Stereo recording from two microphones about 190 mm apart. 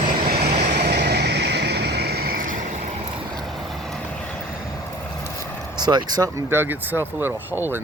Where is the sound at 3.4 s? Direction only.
Centre (ahead or behind).